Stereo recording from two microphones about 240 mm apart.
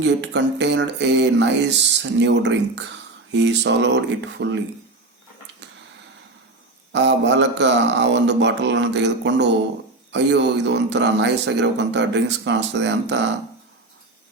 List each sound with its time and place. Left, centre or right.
0.0 s speech: right
6.9 s speech: right